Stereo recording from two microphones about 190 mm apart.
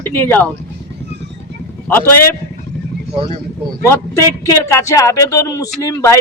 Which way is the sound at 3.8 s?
15° left (ahead or behind).